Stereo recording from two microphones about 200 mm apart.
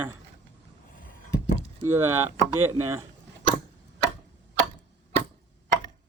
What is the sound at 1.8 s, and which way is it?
Speech, 10° right (ahead or behind).